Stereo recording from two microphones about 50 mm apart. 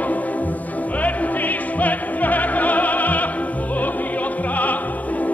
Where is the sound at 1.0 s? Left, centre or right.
Left.